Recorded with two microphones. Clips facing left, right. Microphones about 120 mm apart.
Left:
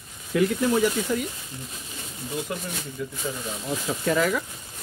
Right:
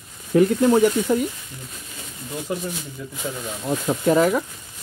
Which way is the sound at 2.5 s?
20° right (ahead or behind).